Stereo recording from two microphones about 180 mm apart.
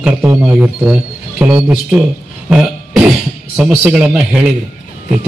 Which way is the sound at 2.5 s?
5° right (ahead or behind).